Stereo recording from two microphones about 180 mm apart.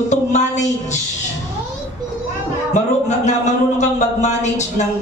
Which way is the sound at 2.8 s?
40° left (ahead or behind).